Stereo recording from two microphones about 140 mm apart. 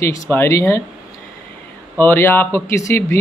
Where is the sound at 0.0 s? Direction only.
20° left (ahead or behind).